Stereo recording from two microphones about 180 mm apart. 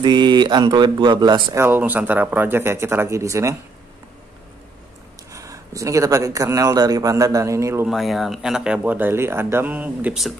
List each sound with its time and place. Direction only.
0.0 s a man's voice: 25° right (ahead or behind)
1.6 s speech: 10° right (ahead or behind)
5.3 s a man's voice: 20° right (ahead or behind)
7.8 s speech: centre (ahead or behind)